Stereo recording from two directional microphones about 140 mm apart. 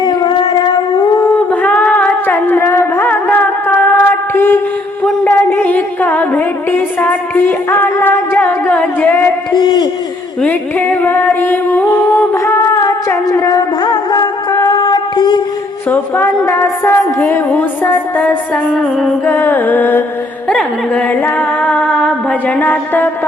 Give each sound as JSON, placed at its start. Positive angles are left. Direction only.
{"t": 0.0, "sound": "howl", "side_deg": 30}
{"t": 1.5, "sound": "a sound", "side_deg": 10}
{"t": 5.0, "sound": "music", "side_deg": 10}
{"t": 9.6, "sound": "a sound", "side_deg": 35}
{"t": 10.4, "sound": "music", "side_deg": 15}
{"t": 15.9, "sound": "a woman's voice", "side_deg": 15}
{"t": 20.5, "sound": "singing", "side_deg": 10}